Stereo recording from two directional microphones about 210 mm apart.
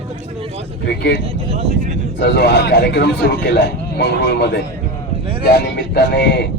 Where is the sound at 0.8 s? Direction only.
50° left (ahead or behind).